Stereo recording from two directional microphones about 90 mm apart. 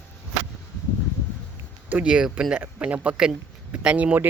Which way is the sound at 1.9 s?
15° right (ahead or behind).